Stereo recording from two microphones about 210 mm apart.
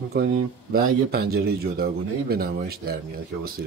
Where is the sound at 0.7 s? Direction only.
45° right (ahead or behind).